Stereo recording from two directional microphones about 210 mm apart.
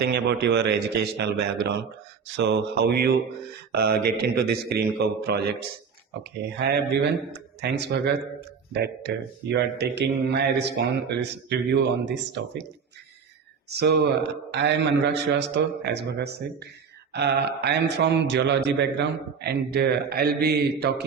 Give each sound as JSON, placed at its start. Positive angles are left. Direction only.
{"t": 0.0, "sound": "speech", "side_deg": -55}
{"t": 13.7, "sound": "speech", "side_deg": -50}